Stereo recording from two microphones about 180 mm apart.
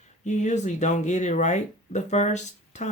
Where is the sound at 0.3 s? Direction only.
40° left (ahead or behind).